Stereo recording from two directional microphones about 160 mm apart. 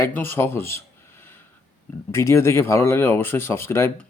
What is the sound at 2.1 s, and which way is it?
Speech, 15° left (ahead or behind).